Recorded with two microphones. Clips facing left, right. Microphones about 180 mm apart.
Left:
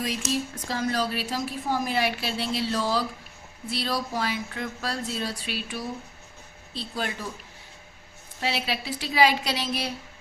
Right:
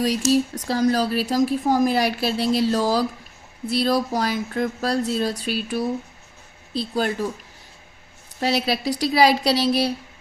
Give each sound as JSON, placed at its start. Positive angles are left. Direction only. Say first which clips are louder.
{"t": 0.3, "sound": "a woman's voice", "louder": "right 9 dB", "side_deg": -35}
{"t": 8.4, "sound": "a woman's voice", "louder": "right 7 dB", "side_deg": -40}